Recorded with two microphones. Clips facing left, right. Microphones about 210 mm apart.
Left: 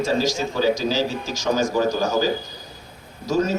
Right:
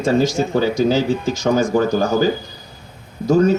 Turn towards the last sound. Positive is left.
turn(degrees=-55)  # may be behind; listen again after turning